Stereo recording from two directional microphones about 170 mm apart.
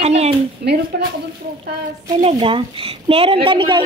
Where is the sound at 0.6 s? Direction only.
75° right (ahead or behind).